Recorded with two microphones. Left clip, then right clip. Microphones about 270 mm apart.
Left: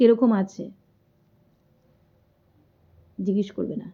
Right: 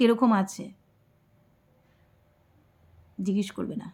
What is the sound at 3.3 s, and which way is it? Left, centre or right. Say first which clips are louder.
Speech: left 5 dB; centre.